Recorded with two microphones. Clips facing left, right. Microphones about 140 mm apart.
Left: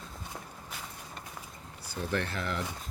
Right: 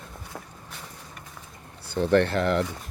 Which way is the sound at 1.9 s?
65° right (ahead or behind).